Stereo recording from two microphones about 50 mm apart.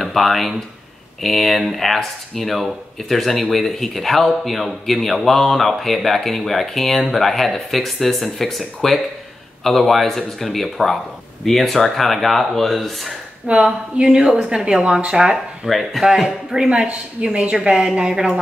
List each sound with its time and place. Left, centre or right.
0.0 s speech: centre
13.5 s speech: right
15.7 s speech: centre
16.5 s a woman's voice: centre